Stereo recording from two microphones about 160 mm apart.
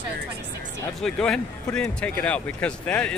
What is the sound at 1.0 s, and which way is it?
Speech, 5° left (ahead or behind).